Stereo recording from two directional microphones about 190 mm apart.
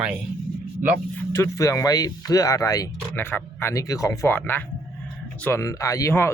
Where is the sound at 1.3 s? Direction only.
15° left (ahead or behind).